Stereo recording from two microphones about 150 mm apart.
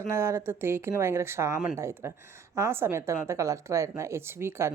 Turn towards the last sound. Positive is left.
turn(degrees=-15)  # may be behind; listen again after turning